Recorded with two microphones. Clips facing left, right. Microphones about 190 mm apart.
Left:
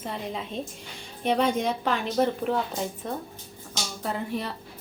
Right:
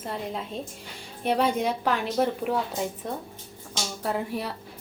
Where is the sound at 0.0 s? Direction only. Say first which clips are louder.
Right 1 dB; 5° right (ahead or behind).